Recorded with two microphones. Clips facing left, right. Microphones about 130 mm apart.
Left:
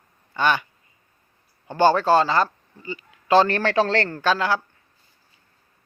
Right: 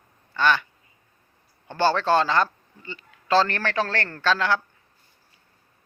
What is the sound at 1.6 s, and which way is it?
Speech, 10° left (ahead or behind).